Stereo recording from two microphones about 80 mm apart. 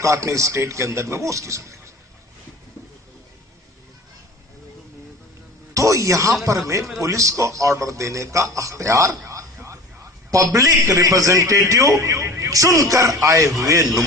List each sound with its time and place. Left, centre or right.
0.0 s a man's voice: right
5.7 s music: right
7.0 s a man's voice: right